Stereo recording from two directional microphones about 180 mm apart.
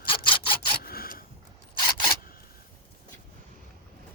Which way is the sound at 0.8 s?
55° left (ahead or behind).